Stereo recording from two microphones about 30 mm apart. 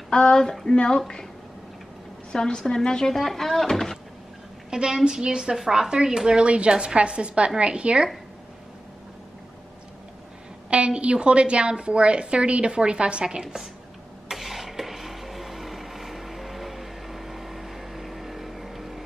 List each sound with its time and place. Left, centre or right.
0.1 s a woman's voice: left
2.3 s a woman's voice: left
3.2 s speech: centre
4.6 s a woman's voice: right
6.4 s a woman's voice: right
11.0 s a woman's voice: right
14.3 s a sound: centre